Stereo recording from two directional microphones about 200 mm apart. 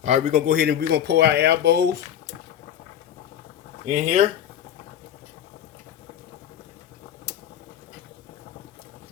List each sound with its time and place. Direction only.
0.0 s speech: 35° right (ahead or behind); by 1.9 s 55° right (ahead or behind)
3.8 s speech: 40° right (ahead or behind)